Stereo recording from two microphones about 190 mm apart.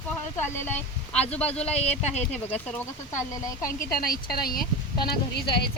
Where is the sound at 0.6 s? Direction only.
10° left (ahead or behind).